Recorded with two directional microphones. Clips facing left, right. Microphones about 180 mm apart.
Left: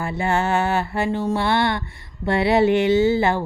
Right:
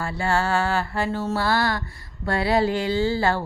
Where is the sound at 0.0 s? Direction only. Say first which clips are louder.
Left 2 dB; 20° left (ahead or behind).